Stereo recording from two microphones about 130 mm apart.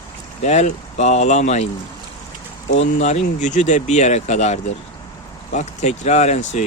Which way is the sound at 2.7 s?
60° left (ahead or behind).